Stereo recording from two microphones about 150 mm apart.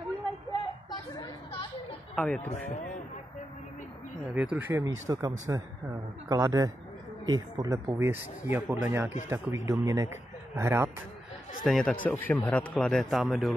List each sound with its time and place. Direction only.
0.5 s a sound: 30° left (ahead or behind)
2.1 s speech: 5° left (ahead or behind)
4.3 s a man's voice: 10° right (ahead or behind)
11.6 s speech: 5° left (ahead or behind)